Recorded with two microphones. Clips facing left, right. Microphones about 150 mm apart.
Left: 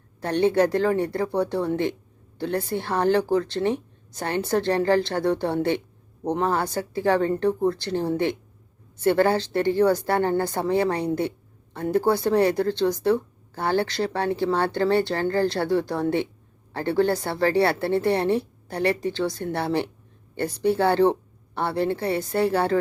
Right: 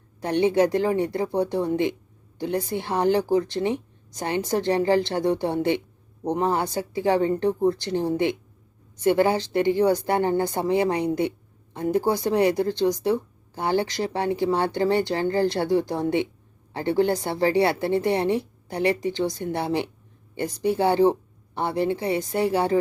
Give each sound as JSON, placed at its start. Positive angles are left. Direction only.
{"t": 0.2, "sound": "a woman's voice", "side_deg": -15}